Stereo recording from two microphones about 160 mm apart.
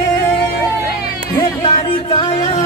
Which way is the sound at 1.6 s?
35° left (ahead or behind).